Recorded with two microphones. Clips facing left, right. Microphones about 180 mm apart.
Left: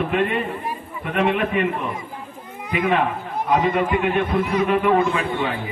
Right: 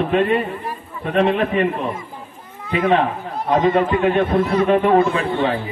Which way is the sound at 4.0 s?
35° right (ahead or behind).